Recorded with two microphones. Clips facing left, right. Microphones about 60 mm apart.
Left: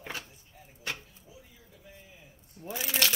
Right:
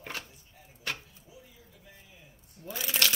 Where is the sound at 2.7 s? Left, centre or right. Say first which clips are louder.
Even; left.